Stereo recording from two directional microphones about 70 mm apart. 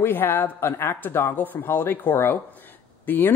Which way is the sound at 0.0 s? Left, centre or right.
Left.